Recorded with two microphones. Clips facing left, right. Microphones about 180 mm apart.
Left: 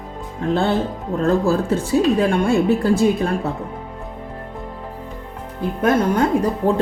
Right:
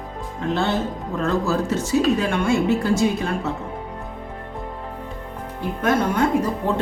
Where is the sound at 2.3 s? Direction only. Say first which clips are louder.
Left 3 dB; 35° left (ahead or behind).